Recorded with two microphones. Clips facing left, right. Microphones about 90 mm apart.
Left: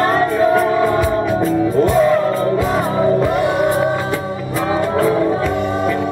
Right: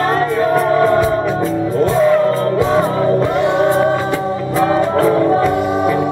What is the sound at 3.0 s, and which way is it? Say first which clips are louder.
Music: even; 5° left (ahead or behind).